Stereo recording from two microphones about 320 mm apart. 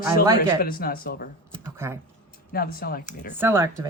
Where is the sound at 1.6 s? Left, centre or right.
Centre.